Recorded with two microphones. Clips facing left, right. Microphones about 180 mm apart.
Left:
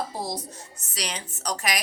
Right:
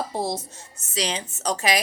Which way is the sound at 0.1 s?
25° right (ahead or behind).